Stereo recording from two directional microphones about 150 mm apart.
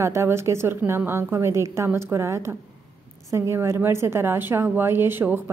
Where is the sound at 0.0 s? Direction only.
20° right (ahead or behind).